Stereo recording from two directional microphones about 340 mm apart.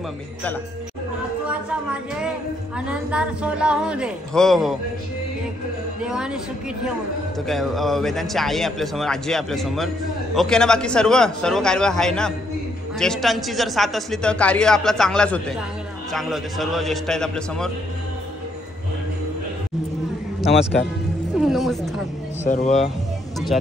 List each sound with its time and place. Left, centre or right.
1.5 s a woman's voice: centre
6.0 s a man's voice: centre
7.4 s a man's voice: centre
21.4 s a man's voice: centre
22.4 s speech: centre